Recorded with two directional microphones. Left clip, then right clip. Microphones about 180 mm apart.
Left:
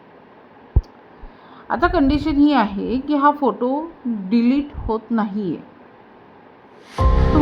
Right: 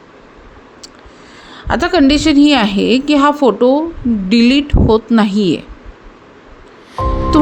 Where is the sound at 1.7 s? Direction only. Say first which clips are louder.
Right 6 dB; 40° right (ahead or behind).